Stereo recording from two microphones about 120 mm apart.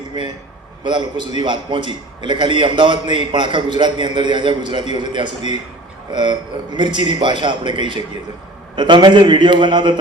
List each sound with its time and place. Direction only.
0.9 s a man's voice: 40° right (ahead or behind)